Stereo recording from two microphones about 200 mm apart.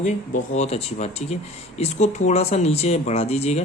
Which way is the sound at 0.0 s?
35° left (ahead or behind).